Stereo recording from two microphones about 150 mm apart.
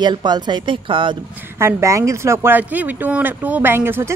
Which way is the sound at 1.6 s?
15° right (ahead or behind).